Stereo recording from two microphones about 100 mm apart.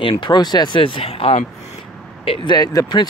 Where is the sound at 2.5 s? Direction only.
40° left (ahead or behind).